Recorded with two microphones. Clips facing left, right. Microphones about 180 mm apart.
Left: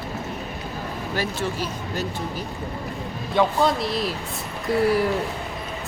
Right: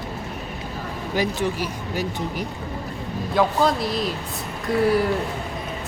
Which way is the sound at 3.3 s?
Centre (ahead or behind).